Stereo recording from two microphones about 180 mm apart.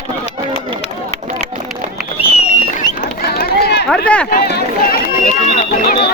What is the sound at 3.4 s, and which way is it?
Run, 60° left (ahead or behind).